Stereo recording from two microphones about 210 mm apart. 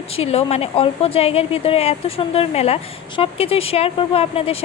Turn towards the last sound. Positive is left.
turn(degrees=30)  # may be behind; listen again after turning